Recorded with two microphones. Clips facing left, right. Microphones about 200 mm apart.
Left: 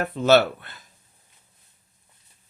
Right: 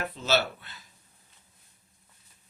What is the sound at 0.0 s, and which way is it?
Speech, 55° left (ahead or behind).